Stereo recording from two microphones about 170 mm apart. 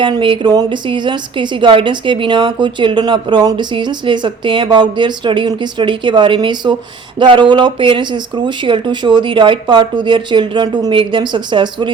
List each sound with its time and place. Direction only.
0.0 s a woman's voice: 30° right (ahead or behind)